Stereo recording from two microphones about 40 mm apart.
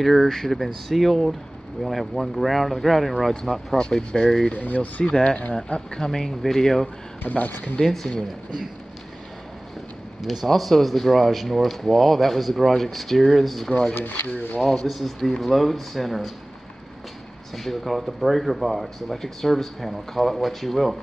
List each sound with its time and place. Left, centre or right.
0.0 s speech: centre
3.8 s speech: centre
4.6 s speech: left
5.0 s speech: left
7.2 s speech: left
7.8 s speech: centre
10.2 s speech: centre
13.7 s speech: centre
14.7 s speech: centre
17.6 s speech: centre